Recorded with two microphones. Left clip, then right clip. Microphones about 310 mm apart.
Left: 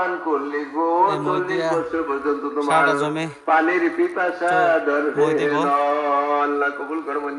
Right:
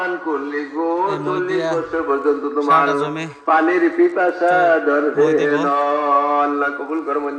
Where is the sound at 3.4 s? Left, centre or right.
Right.